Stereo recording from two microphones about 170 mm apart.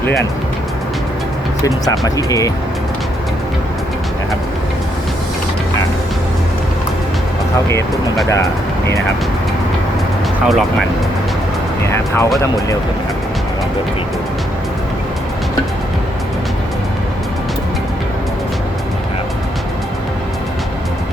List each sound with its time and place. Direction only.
1.6 s speech: 20° left (ahead or behind)
10.4 s speech: centre (ahead or behind)
11.9 s speech: 15° left (ahead or behind)